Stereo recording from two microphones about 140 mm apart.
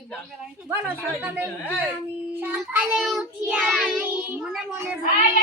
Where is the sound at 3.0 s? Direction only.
5° right (ahead or behind).